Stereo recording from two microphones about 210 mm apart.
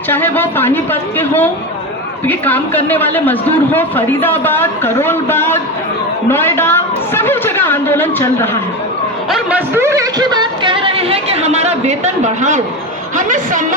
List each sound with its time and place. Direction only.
0.1 s a man's voice: 10° left (ahead or behind)
9.3 s a woman's voice: 5° right (ahead or behind); by 13.7 s 40° right (ahead or behind)